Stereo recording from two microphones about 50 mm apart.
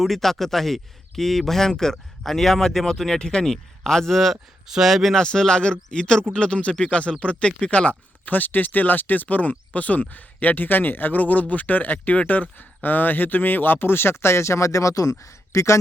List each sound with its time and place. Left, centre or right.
0.0 s speech: centre
4.6 s speech: centre
5.1 s speech: centre; by 15.8 s left